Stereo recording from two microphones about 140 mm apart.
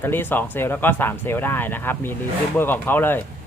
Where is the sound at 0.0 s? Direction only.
15° left (ahead or behind).